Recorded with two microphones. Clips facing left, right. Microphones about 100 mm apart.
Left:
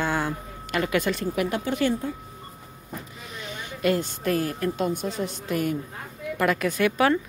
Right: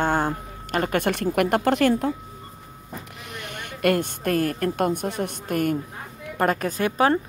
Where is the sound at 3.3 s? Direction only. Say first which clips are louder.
Right 1 dB; 65° right (ahead or behind).